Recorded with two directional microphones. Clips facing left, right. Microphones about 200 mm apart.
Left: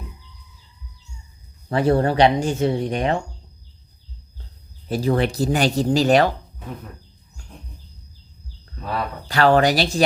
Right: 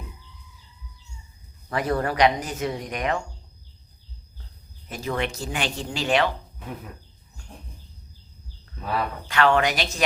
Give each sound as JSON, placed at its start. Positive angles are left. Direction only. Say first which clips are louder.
{"t": 1.7, "sound": "speech", "louder": "left 7 dB", "side_deg": 30}
{"t": 4.9, "sound": "speech", "louder": "left 8 dB", "side_deg": 35}
{"t": 9.2, "sound": "speech", "louder": "left 5 dB", "side_deg": 35}